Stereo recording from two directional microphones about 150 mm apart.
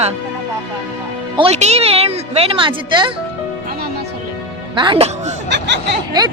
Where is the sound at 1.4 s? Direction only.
45° right (ahead or behind).